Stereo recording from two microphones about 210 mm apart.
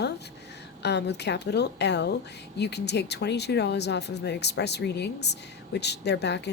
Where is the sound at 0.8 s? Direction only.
55° left (ahead or behind).